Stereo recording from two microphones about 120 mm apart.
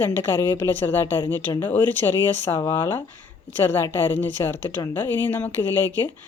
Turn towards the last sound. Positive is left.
turn(degrees=15)  # may be behind; listen again after turning